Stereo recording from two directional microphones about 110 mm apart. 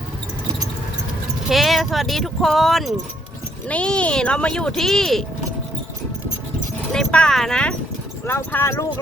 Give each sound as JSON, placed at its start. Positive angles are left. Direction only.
{"t": 1.5, "sound": "speech", "side_deg": 0}
{"t": 6.9, "sound": "speech", "side_deg": 5}
{"t": 8.3, "sound": "speech", "side_deg": 25}